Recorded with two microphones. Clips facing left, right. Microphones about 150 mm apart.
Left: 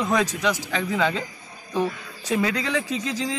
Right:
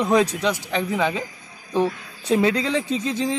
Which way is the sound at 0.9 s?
15° right (ahead or behind).